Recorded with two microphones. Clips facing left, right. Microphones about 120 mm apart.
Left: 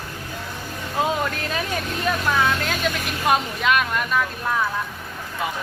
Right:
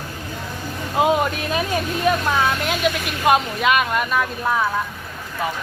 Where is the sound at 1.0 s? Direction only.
20° right (ahead or behind).